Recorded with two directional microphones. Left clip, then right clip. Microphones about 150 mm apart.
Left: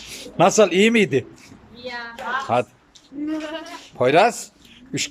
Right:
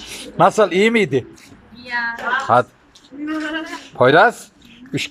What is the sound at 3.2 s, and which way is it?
Speech, 25° left (ahead or behind).